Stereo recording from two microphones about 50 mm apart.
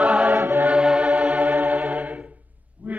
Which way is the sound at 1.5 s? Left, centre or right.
Right.